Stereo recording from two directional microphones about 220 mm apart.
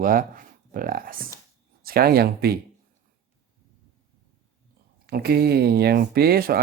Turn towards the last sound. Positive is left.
turn(degrees=-45)  # may be behind; listen again after turning